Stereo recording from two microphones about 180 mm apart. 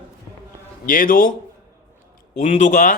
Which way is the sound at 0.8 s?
50° left (ahead or behind).